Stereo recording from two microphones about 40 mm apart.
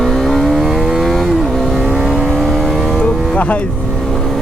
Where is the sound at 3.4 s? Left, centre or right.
Left.